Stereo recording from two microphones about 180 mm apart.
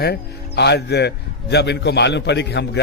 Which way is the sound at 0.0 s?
65° left (ahead or behind).